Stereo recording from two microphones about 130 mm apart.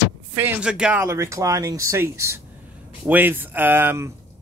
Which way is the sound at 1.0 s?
20° right (ahead or behind).